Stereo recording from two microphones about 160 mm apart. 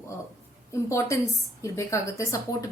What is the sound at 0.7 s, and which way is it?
A woman's voice, 20° left (ahead or behind).